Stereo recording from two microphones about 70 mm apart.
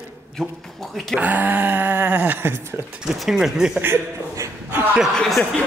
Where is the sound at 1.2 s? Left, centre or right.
Right.